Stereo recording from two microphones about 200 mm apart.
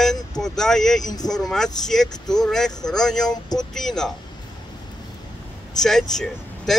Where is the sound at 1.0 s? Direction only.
20° left (ahead or behind).